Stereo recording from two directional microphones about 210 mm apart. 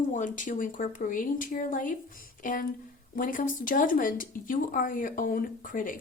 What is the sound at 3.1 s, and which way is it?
A woman's voice, 40° left (ahead or behind).